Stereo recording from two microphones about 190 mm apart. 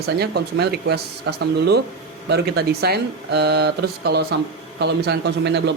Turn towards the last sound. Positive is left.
turn(degrees=-60)  # may be behind; listen again after turning